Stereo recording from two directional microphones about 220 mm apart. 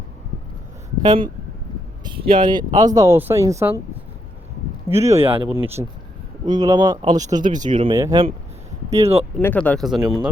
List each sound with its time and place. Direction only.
1.0 s speech: 20° right (ahead or behind)
4.9 s speech: 10° right (ahead or behind)
5.1 s speech: 25° right (ahead or behind)
9.0 s speech: 25° right (ahead or behind)
9.4 s speech: 5° left (ahead or behind)